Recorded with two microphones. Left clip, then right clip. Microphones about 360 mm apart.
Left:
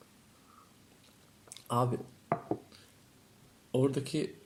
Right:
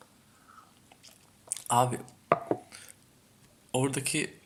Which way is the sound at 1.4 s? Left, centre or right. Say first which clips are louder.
Right 6 dB; centre.